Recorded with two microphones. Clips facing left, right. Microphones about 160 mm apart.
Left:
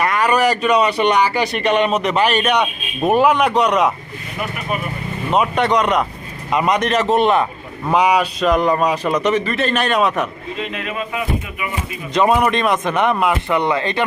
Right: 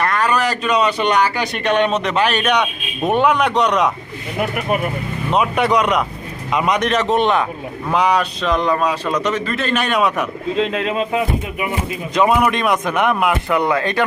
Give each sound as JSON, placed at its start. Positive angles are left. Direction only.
{"t": 0.0, "sound": "speech", "side_deg": 10}
{"t": 5.3, "sound": "a man's voice", "side_deg": 0}
{"t": 10.8, "sound": "speech", "side_deg": -30}
{"t": 12.1, "sound": "speech", "side_deg": 0}